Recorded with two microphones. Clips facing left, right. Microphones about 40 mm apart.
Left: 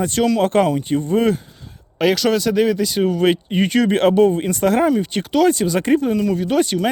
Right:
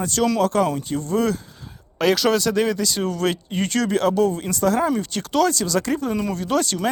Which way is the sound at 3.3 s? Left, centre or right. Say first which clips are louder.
Left 6 dB; left.